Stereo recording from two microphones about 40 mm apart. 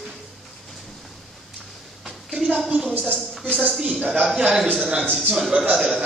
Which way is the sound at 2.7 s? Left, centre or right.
Right.